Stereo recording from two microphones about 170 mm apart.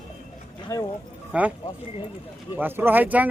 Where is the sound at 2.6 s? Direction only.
10° right (ahead or behind).